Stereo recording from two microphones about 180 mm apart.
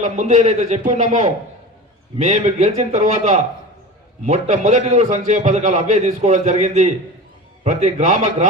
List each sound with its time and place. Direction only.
0.0 s a man's voice: 45° right (ahead or behind)